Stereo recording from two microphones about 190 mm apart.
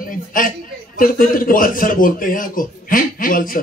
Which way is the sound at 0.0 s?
45° left (ahead or behind).